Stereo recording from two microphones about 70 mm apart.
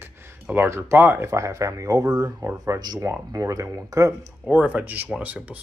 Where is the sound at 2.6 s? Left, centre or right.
Right.